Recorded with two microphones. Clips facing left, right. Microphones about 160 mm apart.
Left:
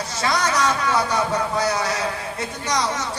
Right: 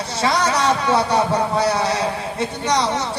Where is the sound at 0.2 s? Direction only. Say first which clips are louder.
Right 3 dB; 30° right (ahead or behind).